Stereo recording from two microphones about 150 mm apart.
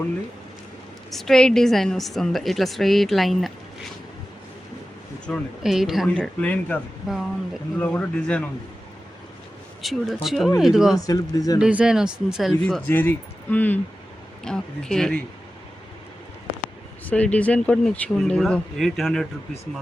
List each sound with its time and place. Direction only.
1.1 s a woman's voice: centre (ahead or behind)
5.2 s speech: centre (ahead or behind)
7.8 s speech: 10° left (ahead or behind)
9.8 s a woman's voice: centre (ahead or behind)
10.9 s speech: 25° left (ahead or behind)
11.6 s a woman's voice: 5° right (ahead or behind)
12.9 s a woman's voice: 10° left (ahead or behind)
17.1 s a woman's voice: 10° left (ahead or behind)